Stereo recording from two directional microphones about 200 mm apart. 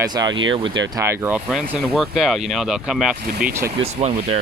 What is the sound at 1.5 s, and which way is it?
Speech, centre (ahead or behind).